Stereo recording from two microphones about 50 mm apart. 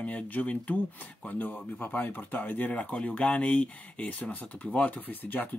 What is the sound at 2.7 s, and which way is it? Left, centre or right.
Speech, left.